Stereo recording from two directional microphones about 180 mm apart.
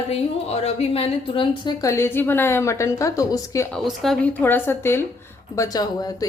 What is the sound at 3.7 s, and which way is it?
A woman's voice, centre (ahead or behind).